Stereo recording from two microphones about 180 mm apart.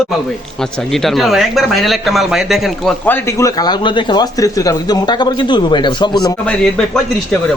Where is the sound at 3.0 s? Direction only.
15° left (ahead or behind).